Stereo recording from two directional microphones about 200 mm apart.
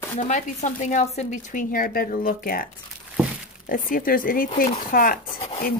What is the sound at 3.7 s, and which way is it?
Speech, 45° left (ahead or behind).